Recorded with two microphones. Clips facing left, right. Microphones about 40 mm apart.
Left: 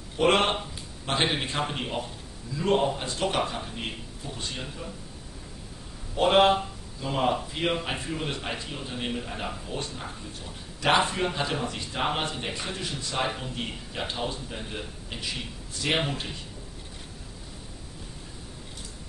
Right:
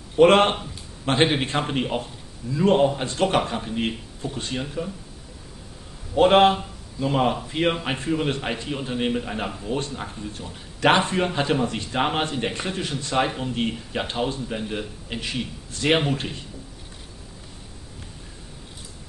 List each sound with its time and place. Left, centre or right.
0.2 s a man's voice: centre
6.1 s a man's voice: centre